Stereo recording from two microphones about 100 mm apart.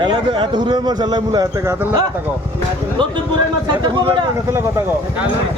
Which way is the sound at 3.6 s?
50° right (ahead or behind).